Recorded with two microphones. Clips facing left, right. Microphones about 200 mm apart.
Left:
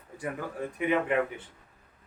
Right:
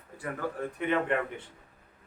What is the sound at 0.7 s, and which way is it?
Speech, 5° left (ahead or behind).